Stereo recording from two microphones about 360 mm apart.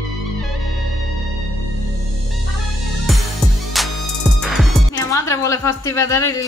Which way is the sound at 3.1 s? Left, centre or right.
Centre.